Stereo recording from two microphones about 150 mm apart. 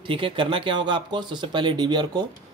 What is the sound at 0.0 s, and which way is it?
Speech, 35° right (ahead or behind).